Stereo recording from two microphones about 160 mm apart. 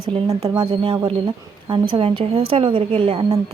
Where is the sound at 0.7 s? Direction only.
35° right (ahead or behind).